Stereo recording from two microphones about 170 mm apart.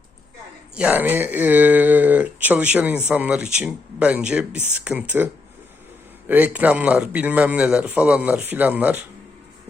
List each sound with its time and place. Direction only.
0.8 s speech: 10° right (ahead or behind)